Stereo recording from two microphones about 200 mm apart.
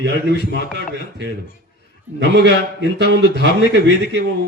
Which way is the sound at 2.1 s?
60° right (ahead or behind).